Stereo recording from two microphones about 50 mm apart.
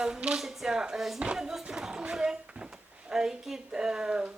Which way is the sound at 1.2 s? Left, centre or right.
Centre.